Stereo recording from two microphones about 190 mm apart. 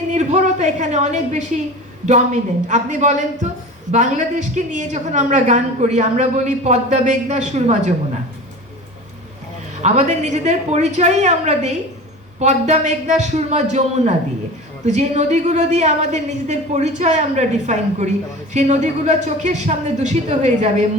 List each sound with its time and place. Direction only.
0.1 s a woman's voice: 40° right (ahead or behind)
9.8 s a woman's voice: 35° right (ahead or behind)